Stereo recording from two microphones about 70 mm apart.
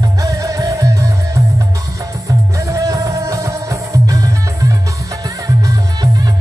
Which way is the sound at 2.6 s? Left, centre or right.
Right.